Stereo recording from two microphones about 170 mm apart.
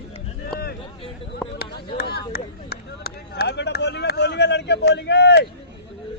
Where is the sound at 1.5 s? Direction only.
65° left (ahead or behind); by 5.5 s 85° left.